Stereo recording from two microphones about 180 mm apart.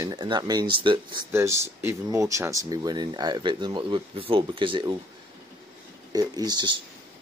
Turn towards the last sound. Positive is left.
turn(degrees=-25)  # may be behind; listen again after turning